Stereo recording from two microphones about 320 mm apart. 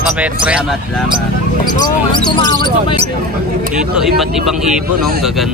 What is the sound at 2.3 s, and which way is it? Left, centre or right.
Speech, centre.